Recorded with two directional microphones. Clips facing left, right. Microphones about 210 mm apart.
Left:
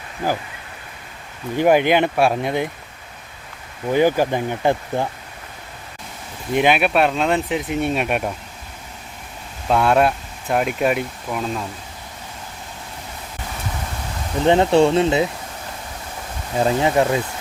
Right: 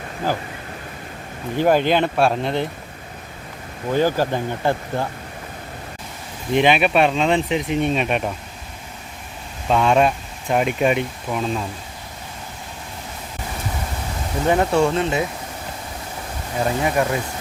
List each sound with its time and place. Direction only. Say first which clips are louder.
1.5 s speech: left 2 dB; 15° left (ahead or behind)
3.9 s speech: left 2 dB; 15° left (ahead or behind)
6.5 s speech: right 1 dB; 5° left (ahead or behind)
9.6 s speech: even; 5° left (ahead or behind)
14.4 s speech: left 3 dB; 25° left (ahead or behind)
16.8 s speech: left 2 dB; 25° left (ahead or behind)